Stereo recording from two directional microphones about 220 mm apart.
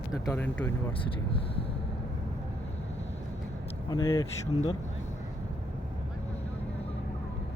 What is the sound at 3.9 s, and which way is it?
Speech, 15° left (ahead or behind).